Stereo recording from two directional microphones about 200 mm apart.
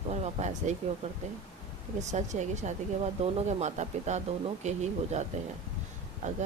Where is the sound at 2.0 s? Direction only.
35° right (ahead or behind).